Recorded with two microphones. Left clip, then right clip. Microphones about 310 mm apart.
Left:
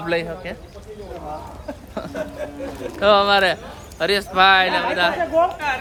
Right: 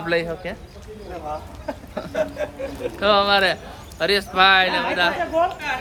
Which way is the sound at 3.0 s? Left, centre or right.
Centre.